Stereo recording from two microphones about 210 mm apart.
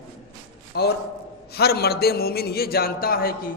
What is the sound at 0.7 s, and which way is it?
A man's voice, 50° left (ahead or behind).